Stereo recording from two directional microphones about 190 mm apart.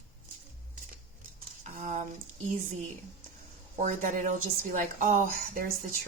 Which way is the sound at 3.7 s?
40° right (ahead or behind).